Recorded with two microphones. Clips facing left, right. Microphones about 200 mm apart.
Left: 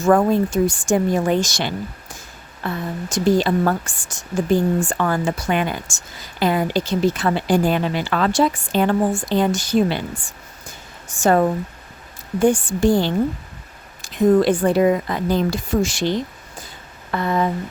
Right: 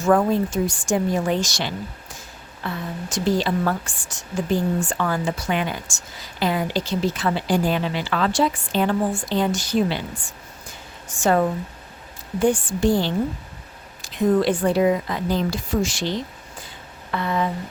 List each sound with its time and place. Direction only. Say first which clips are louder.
0.1 s speech: left 3 dB; 50° left (ahead or behind)
11.1 s speech: left 3 dB; 45° left (ahead or behind)